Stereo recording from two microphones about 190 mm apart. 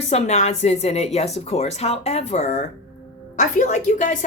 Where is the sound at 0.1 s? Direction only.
35° left (ahead or behind).